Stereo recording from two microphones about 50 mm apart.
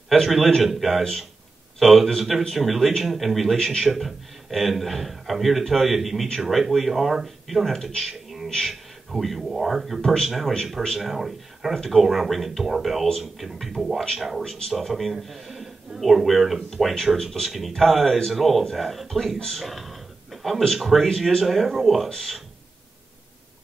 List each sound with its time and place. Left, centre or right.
0.1 s speech: centre